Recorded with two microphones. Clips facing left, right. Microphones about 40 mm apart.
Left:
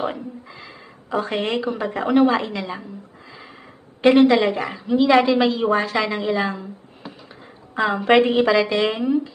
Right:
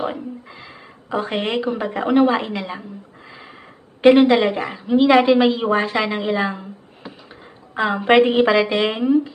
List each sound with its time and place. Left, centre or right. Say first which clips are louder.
0.4 s a sound: even; centre
1.1 s a woman's voice: right 1 dB; centre
4.0 s a woman's voice: right 2 dB; centre
7.7 s a woman's voice: right 1 dB; centre